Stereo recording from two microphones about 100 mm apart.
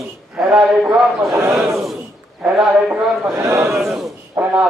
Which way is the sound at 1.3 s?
30° right (ahead or behind).